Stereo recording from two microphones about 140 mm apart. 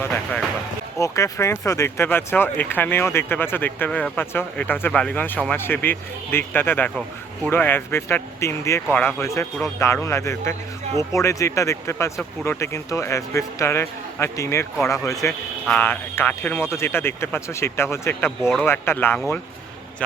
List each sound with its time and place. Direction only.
0.0 s speech: 10° left (ahead or behind)